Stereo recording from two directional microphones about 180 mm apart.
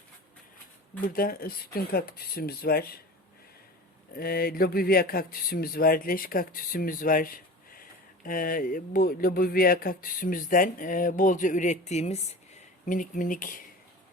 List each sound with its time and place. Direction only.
1.0 s speech: 55° left (ahead or behind)
4.1 s speech: 55° left (ahead or behind); by 12.2 s 35° left (ahead or behind)
12.8 s speech: 45° left (ahead or behind)